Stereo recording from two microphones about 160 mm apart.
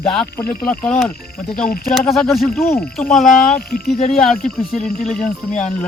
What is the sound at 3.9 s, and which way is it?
Speech, 40° left (ahead or behind).